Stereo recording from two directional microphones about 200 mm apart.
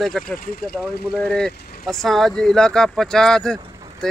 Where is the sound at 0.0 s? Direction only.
Centre (ahead or behind).